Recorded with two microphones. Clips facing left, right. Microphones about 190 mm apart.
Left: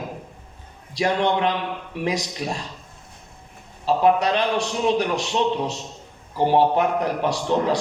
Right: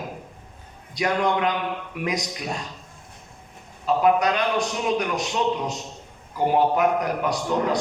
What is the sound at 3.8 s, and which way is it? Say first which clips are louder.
A man's voice: left 1 dB; 30° left (ahead or behind).